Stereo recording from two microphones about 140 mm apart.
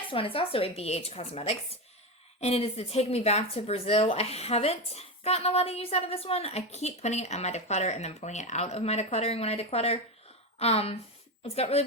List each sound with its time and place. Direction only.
0.1 s speech: 40° left (ahead or behind)